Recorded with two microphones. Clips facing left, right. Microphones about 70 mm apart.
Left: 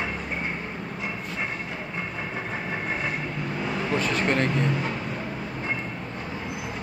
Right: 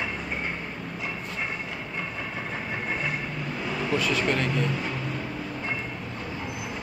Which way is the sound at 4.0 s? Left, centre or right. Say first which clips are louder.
Left 2 dB; left.